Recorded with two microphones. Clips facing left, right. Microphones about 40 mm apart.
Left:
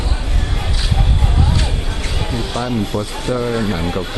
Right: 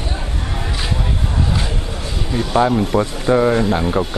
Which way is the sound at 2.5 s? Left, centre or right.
Right.